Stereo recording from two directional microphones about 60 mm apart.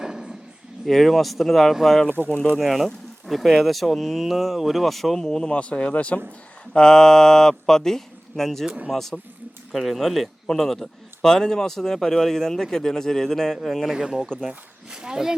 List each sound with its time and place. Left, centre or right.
0.0 s a sound: centre
0.9 s speech: centre
2.1 s speech: right
2.6 s speech: centre; by 6.1 s left
6.7 s speech: centre
13.9 s speech: centre